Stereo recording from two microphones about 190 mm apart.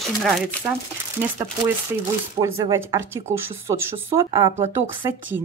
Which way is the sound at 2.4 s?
20° right (ahead or behind).